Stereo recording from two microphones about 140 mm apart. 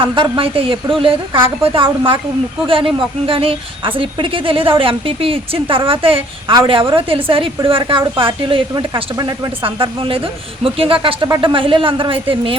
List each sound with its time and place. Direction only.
0.2 s a woman's voice: 40° right (ahead or behind)
1.3 s a woman's voice: 15° right (ahead or behind)
1.6 s a woman's voice: 40° right (ahead or behind)